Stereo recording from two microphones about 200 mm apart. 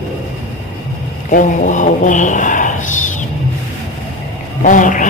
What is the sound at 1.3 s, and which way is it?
Speech, 40° left (ahead or behind).